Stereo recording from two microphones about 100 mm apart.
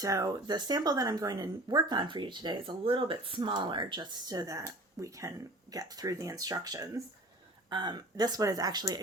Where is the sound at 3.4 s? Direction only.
50° right (ahead or behind).